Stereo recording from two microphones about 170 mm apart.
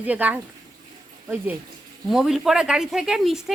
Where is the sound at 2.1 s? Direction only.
Centre (ahead or behind).